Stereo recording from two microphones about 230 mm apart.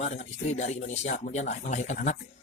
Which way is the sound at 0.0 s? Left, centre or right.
Left.